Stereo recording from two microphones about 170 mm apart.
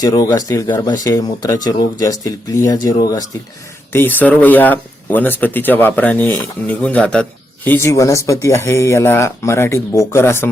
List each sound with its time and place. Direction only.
0.0 s speech: 20° left (ahead or behind)